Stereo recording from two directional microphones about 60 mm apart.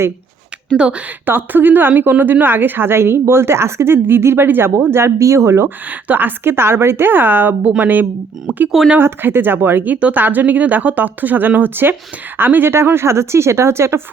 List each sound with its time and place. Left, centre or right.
0.8 s a woman's voice: centre
1.2 s a woman's voice: right
5.2 s speech: right
5.6 s a woman's voice: right
9.0 s a woman's voice: right